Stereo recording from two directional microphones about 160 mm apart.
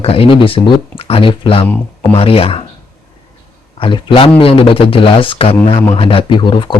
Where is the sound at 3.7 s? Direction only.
30° left (ahead or behind).